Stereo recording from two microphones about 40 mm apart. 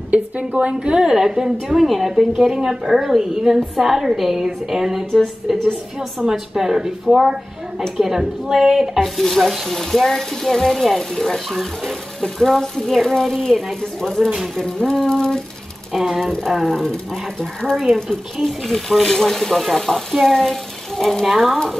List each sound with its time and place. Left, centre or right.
0.1 s a woman's voice: right
0.8 s a woman's voice: centre
9.0 s speech: centre
15.9 s a woman's voice: centre
16.2 s speech: centre
18.4 s speech: centre
21.0 s stir: centre